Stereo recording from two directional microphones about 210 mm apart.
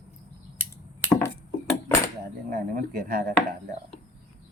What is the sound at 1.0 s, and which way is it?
Chop, 15° left (ahead or behind).